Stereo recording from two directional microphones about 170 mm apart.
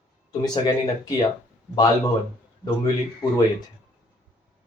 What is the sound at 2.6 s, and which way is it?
Speech, 25° left (ahead or behind).